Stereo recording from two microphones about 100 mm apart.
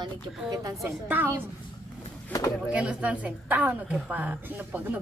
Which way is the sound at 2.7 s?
10° right (ahead or behind).